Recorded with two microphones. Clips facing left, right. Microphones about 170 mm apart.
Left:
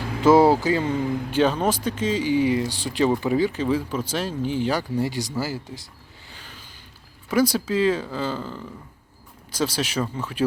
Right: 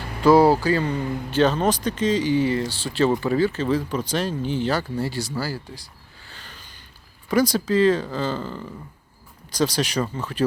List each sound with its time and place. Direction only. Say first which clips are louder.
0.2 s speech: even; 20° left (ahead or behind)
6.3 s a sound: even; 10° left (ahead or behind)
7.3 s speech: right 1 dB; 5° left (ahead or behind)